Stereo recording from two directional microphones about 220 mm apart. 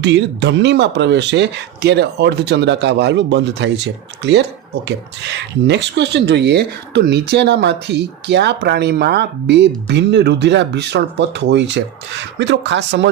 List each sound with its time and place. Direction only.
0.0 s speech: 50° right (ahead or behind)